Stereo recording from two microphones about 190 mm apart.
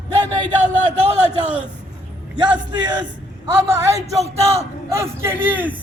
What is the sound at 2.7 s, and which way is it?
Speech, 25° right (ahead or behind).